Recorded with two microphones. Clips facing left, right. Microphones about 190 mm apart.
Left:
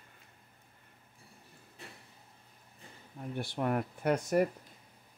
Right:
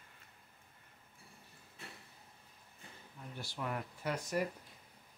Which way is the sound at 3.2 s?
55° left (ahead or behind).